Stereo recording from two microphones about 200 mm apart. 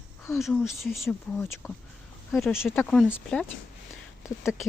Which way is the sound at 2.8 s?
10° left (ahead or behind).